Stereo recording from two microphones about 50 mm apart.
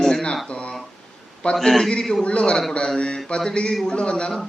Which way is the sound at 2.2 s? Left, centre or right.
Left.